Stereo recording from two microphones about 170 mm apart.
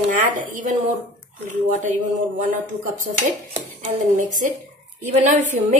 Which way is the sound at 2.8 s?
50° right (ahead or behind).